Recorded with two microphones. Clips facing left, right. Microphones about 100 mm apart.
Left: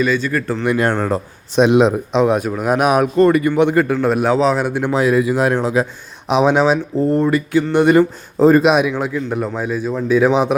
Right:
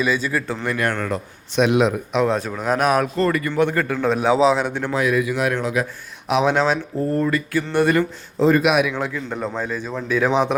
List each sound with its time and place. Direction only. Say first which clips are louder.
0.0 s speech: left 4 dB; 5° right (ahead or behind)
0.6 s a man's voice: left 6 dB; 20° left (ahead or behind)
4.9 s speech: left 6 dB; 30° left (ahead or behind)
8.4 s a man's voice: left 5 dB; 40° left (ahead or behind)
8.9 s a man's voice: left 5 dB; 15° left (ahead or behind)